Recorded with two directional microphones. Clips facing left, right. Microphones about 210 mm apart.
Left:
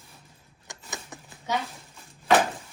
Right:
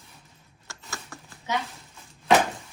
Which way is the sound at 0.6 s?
20° left (ahead or behind).